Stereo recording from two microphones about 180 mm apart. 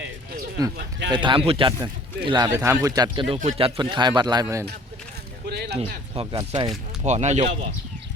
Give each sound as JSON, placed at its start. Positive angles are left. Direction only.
{"t": 1.1, "sound": "speech", "side_deg": -25}
{"t": 5.5, "sound": "a sound", "side_deg": -60}
{"t": 6.1, "sound": "speech", "side_deg": -30}